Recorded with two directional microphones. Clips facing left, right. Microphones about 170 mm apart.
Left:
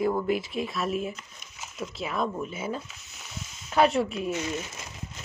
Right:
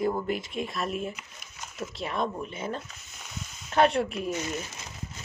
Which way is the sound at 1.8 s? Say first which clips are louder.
Left 1 dB; centre (ahead or behind).